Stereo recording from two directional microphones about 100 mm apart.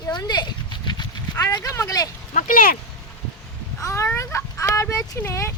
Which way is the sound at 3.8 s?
30° left (ahead or behind).